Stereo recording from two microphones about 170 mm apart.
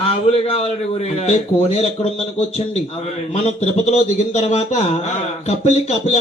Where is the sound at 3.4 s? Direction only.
40° left (ahead or behind).